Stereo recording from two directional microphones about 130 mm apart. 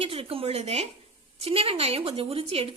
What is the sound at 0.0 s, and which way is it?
Speech, 45° right (ahead or behind).